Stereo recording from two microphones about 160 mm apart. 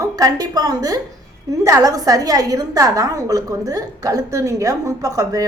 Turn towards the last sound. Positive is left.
turn(degrees=-20)  # may be behind; listen again after turning